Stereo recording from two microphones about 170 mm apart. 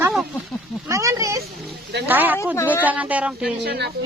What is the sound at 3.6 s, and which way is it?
Speech, 80° right.